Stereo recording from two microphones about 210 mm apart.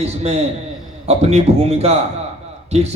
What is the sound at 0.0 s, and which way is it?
A man's voice, 30° right (ahead or behind).